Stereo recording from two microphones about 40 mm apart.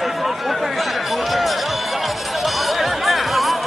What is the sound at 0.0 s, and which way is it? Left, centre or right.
Chatter, centre.